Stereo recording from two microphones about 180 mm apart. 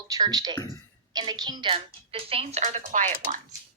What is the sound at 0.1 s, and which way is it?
A woman's voice, 20° right (ahead or behind).